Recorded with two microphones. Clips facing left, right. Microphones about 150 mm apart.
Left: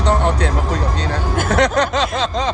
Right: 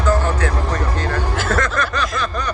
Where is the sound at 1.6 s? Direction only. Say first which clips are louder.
Left 5 dB; 75° left (ahead or behind).